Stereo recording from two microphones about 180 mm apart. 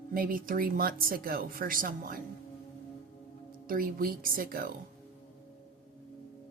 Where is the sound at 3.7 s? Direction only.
50° right (ahead or behind).